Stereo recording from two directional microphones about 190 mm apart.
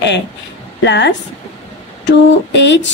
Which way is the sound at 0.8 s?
65° left (ahead or behind).